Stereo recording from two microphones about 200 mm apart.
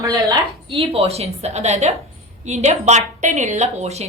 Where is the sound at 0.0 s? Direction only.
15° right (ahead or behind).